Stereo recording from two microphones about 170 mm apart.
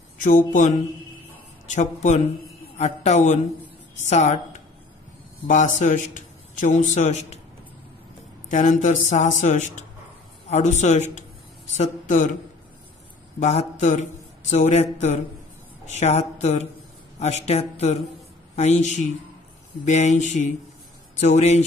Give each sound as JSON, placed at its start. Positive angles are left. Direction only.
{"t": 0.2, "sound": "a man's voice", "side_deg": 50}
{"t": 5.8, "sound": "speech", "side_deg": 50}
{"t": 8.5, "sound": "speech", "side_deg": 45}
{"t": 13.4, "sound": "a woman's voice", "side_deg": 40}